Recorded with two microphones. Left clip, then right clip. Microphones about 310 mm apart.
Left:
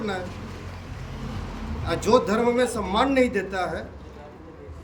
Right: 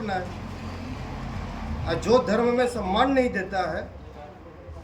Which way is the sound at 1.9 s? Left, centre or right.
Centre.